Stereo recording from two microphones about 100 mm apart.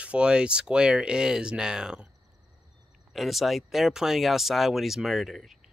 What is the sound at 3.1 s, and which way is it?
Speech, centre (ahead or behind).